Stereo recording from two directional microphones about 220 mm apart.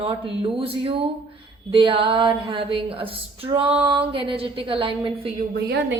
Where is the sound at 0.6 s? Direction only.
25° right (ahead or behind).